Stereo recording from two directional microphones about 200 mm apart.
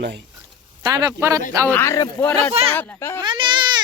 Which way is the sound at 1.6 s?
10° left (ahead or behind).